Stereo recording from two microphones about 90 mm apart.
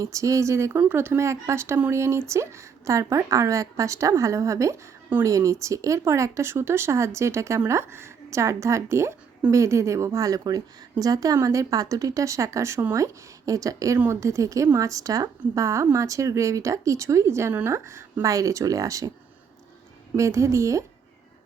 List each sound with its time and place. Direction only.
0.0 s a woman's voice: 35° right (ahead or behind)
20.1 s a woman's voice: 35° right (ahead or behind)